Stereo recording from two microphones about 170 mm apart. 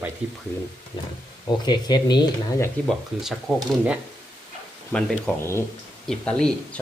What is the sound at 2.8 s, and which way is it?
Speech, centre (ahead or behind).